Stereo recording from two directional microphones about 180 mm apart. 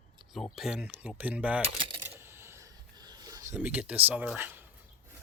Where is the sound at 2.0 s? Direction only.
15° right (ahead or behind).